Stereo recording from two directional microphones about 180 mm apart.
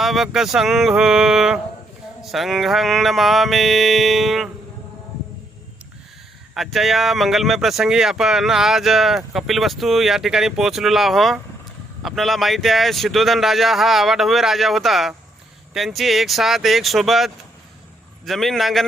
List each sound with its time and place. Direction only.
0.0 s speech: centre (ahead or behind)
6.5 s speech: centre (ahead or behind)